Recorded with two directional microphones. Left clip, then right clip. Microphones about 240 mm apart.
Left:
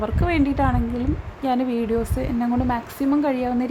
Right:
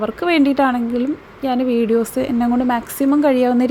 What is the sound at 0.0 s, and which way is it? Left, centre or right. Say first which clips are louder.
A woman's voice: right 6 dB; centre.